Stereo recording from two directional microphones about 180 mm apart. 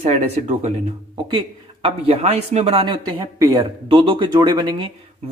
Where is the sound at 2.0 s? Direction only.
35° right (ahead or behind).